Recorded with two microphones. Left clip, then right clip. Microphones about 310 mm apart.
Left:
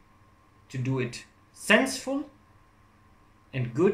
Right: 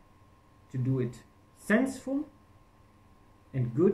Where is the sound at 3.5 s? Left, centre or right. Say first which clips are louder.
Left 2 dB; left.